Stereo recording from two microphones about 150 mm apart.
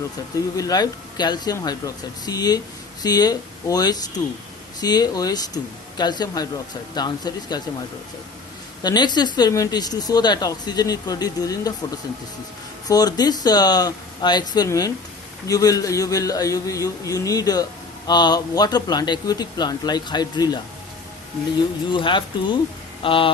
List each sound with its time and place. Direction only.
0.5 s a man's voice: 25° left (ahead or behind)
8.8 s a man's voice: 30° left (ahead or behind)
12.9 s a man's voice: 25° left (ahead or behind)
21.9 s speech: 30° left (ahead or behind)